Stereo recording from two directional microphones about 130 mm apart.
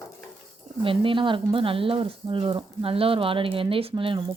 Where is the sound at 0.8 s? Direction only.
40° right (ahead or behind).